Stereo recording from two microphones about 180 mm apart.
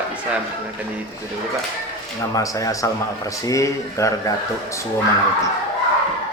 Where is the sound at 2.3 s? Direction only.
20° left (ahead or behind).